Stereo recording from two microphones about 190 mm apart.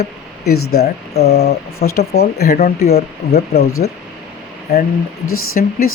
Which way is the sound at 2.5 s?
40° left (ahead or behind).